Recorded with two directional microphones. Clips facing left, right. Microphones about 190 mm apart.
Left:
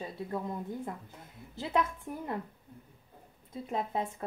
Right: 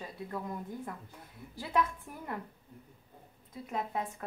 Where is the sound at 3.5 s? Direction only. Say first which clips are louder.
Left 2 dB; 25° left (ahead or behind).